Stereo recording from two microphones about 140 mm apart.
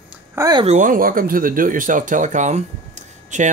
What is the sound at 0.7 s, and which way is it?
Speech, 65° right (ahead or behind).